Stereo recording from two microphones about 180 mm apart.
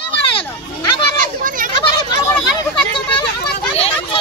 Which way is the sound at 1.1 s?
50° right (ahead or behind).